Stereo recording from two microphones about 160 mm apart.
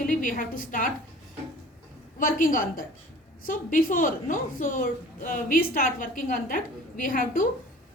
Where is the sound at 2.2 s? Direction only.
60° left (ahead or behind).